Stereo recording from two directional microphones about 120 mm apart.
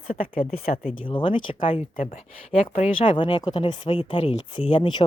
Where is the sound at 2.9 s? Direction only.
45° left (ahead or behind).